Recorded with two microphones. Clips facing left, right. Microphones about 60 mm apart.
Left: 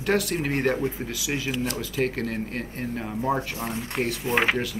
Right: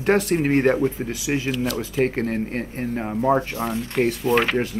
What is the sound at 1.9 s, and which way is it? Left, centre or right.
Speech, right.